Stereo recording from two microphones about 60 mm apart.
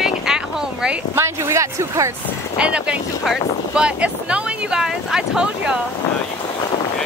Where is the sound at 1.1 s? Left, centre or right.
Right.